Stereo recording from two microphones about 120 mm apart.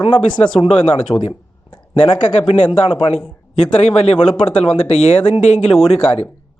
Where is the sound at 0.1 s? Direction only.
40° left (ahead or behind).